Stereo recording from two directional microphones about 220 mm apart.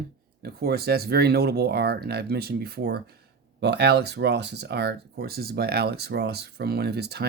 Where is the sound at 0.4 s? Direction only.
45° right (ahead or behind).